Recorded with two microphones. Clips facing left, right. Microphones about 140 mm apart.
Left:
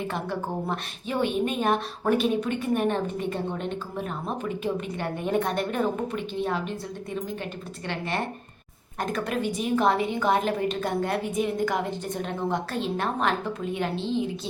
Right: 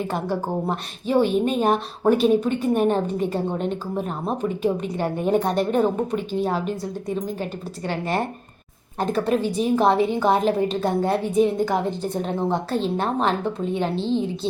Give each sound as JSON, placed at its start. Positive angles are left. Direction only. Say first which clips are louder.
{"t": 0.1, "sound": "a woman's voice", "louder": "right 5 dB", "side_deg": -35}
{"t": 7.9, "sound": "a woman's voice", "louder": "right 5 dB", "side_deg": -40}